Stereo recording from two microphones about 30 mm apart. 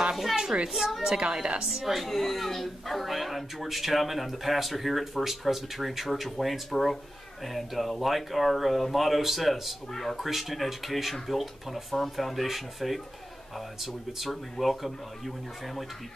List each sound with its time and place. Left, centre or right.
0.1 s a sound: centre
1.0 s a woman's voice: right
1.8 s a woman's voice: centre
2.0 s speech: centre